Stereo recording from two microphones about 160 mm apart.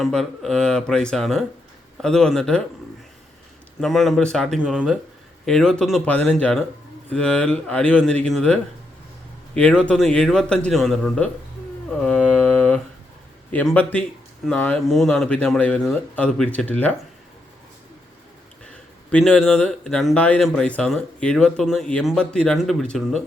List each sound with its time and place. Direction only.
0.0 s speech: 5° left (ahead or behind)
3.8 s speech: centre (ahead or behind)
11.9 s mantra: 5° left (ahead or behind)
13.5 s speech: 10° left (ahead or behind)
19.1 s speech: 5° left (ahead or behind)